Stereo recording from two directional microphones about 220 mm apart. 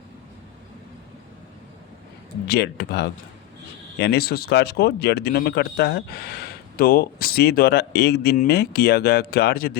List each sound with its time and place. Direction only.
2.5 s speech: 45° left (ahead or behind)